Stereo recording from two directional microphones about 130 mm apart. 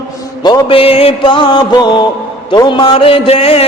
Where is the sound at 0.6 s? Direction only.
45° left (ahead or behind).